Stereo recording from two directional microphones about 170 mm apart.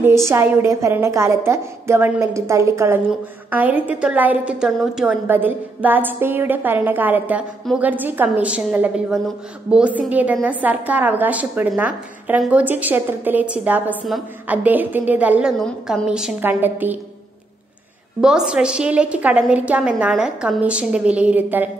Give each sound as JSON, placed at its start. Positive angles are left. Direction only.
{"t": 0.0, "sound": "a woman's voice", "side_deg": -15}
{"t": 18.2, "sound": "a woman's voice", "side_deg": -5}